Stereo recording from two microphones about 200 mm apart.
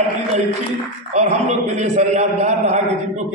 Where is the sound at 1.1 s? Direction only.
35° right (ahead or behind).